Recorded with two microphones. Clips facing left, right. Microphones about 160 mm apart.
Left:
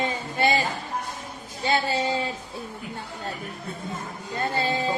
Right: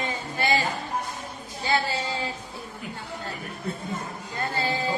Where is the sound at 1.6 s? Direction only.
25° left (ahead or behind).